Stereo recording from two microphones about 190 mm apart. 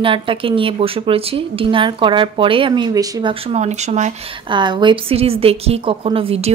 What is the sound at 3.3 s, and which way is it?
Speech, 30° right (ahead or behind).